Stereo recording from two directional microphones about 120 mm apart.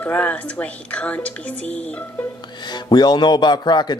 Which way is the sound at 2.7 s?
35° left (ahead or behind).